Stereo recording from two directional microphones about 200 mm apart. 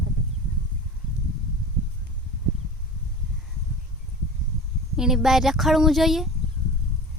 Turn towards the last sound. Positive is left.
turn(degrees=0)  # may be behind; listen again after turning